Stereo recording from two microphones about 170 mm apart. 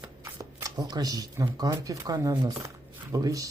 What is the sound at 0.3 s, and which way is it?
Speech, 20° right (ahead or behind).